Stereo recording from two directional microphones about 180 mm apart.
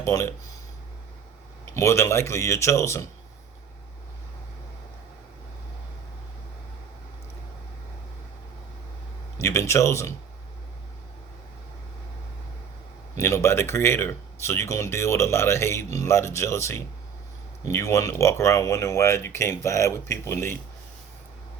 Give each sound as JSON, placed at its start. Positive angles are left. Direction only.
{"t": 0.0, "sound": "speech", "side_deg": 15}
{"t": 1.7, "sound": "speech", "side_deg": 15}
{"t": 9.4, "sound": "speech", "side_deg": 15}
{"t": 13.1, "sound": "speech", "side_deg": 15}